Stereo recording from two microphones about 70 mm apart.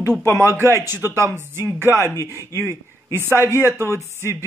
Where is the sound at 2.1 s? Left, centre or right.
Left.